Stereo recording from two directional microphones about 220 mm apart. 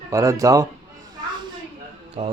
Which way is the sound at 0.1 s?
15° right (ahead or behind).